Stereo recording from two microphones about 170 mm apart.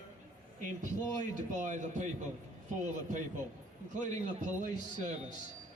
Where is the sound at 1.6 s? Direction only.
45° right (ahead or behind).